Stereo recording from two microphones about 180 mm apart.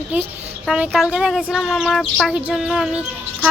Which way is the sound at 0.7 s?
5° right (ahead or behind).